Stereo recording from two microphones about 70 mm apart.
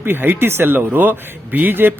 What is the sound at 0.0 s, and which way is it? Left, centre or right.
Speech, right.